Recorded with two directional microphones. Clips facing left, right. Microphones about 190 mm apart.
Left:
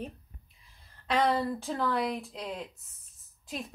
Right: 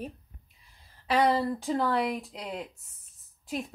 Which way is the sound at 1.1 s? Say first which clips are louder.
Right 2 dB; 10° right (ahead or behind).